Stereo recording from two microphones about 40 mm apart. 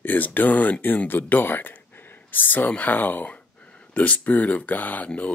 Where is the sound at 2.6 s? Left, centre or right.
Left.